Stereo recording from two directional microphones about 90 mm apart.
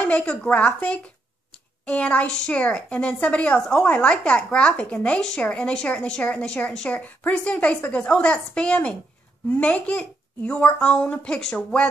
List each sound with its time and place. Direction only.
0.0 s speech: 15° left (ahead or behind)